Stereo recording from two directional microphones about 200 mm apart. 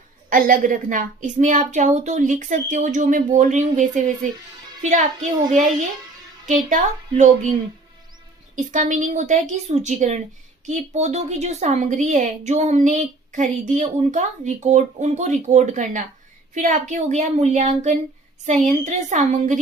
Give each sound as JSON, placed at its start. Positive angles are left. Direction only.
{"t": 0.3, "sound": "a woman's voice", "side_deg": -45}
{"t": 6.4, "sound": "a woman's voice", "side_deg": -40}
{"t": 8.7, "sound": "a woman's voice", "side_deg": -40}